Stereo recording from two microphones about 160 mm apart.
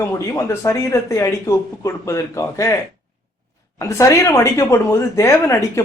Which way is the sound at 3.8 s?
20° left (ahead or behind).